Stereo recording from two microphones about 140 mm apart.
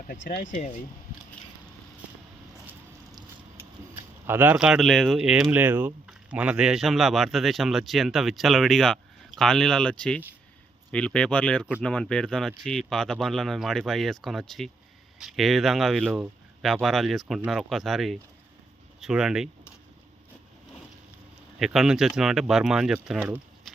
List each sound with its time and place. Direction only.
0.1 s speech: 75° left (ahead or behind)
4.3 s speech: 15° right (ahead or behind)
4.5 s a man's voice: 5° right (ahead or behind)
16.0 s a sound: 10° right (ahead or behind)
16.6 s a man's voice: centre (ahead or behind)
21.6 s a man's voice: 5° right (ahead or behind)
23.0 s a sound: 5° right (ahead or behind)